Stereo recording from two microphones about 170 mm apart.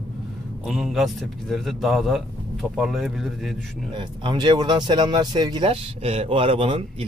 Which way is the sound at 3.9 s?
30° right (ahead or behind).